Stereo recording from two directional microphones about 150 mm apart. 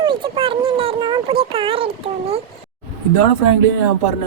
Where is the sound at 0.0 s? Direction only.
30° right (ahead or behind).